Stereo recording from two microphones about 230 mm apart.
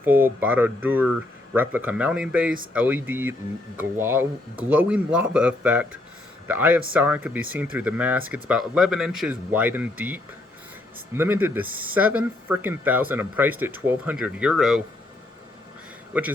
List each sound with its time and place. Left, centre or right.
0.0 s speech: centre
16.1 s speech: centre